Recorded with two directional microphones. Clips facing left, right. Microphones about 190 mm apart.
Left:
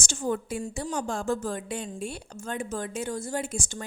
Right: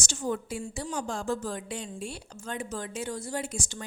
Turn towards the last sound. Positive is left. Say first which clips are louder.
# left 2 dB
turn(degrees=50)  # may be behind; listen again after turning